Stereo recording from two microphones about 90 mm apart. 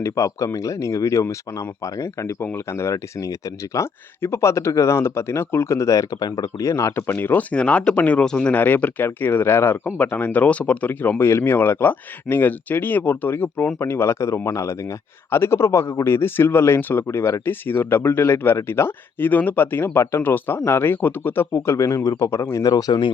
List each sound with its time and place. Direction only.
0.0 s speech: 35° left (ahead or behind)
7.1 s speech: 20° left (ahead or behind); by 23.0 s 50° left (ahead or behind)